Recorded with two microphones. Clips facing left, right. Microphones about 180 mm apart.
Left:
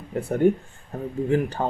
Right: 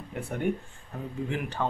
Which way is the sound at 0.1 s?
40° left (ahead or behind).